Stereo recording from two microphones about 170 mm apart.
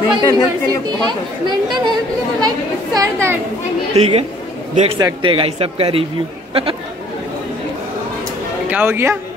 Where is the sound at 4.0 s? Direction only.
35° right (ahead or behind).